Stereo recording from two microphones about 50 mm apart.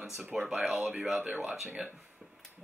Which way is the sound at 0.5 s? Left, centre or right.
Centre.